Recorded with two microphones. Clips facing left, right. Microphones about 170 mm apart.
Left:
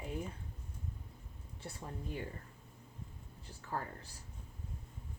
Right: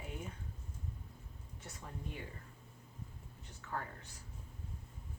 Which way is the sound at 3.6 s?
35° left (ahead or behind).